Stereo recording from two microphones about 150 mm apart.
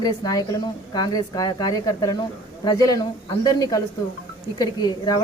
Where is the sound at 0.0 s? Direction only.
25° left (ahead or behind).